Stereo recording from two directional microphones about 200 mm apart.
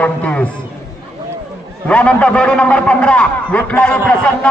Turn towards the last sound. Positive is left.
turn(degrees=5)  # may be behind; listen again after turning